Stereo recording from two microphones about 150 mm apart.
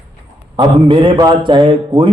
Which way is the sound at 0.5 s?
35° right (ahead or behind).